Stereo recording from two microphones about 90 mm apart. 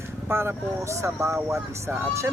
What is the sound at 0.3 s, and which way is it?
Speech, 25° right (ahead or behind).